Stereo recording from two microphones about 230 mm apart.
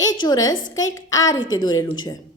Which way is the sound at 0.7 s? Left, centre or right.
Centre.